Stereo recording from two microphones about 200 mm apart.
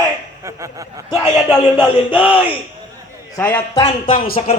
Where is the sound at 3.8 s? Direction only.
25° left (ahead or behind).